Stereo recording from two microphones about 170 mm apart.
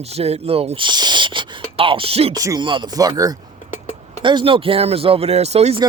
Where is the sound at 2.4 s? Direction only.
20° right (ahead or behind); by 5.8 s 40° right (ahead or behind).